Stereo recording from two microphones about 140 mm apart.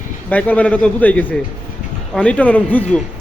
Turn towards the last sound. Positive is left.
turn(degrees=10)  # may be behind; listen again after turning